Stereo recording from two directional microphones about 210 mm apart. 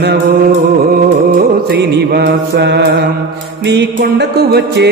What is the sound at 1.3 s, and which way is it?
Music, 45° right (ahead or behind).